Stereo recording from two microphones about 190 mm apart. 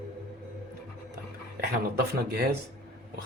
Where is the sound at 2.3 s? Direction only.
55° right (ahead or behind).